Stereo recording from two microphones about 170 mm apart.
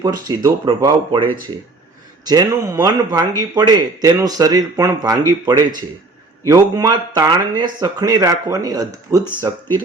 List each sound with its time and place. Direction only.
0.0 s speech: 20° right (ahead or behind)
9.1 s speech: 10° right (ahead or behind)